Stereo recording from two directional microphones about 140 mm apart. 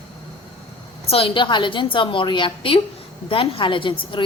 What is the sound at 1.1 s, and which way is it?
A woman's voice, 40° left (ahead or behind).